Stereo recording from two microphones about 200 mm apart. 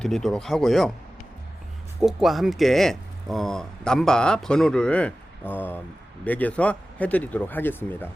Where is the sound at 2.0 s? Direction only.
Centre (ahead or behind).